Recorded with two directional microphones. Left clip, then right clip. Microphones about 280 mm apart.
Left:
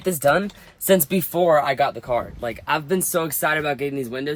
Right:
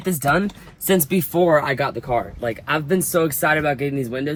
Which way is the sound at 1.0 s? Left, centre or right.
Centre.